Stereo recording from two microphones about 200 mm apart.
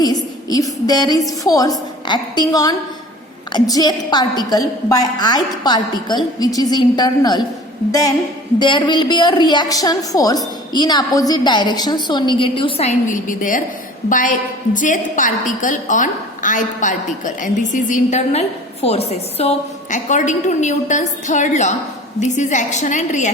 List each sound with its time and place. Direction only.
0.0 s a sound: 20° left (ahead or behind)
0.9 s a woman's voice: 20° left (ahead or behind)
8.5 s a woman's voice: 25° left (ahead or behind)